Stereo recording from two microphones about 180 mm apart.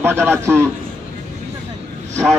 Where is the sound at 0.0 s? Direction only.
15° right (ahead or behind).